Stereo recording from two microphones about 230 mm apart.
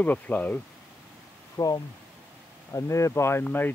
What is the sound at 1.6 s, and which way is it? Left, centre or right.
Speech, centre.